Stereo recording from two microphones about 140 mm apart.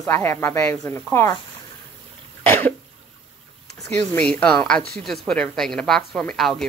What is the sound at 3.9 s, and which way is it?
Speech, 10° left (ahead or behind).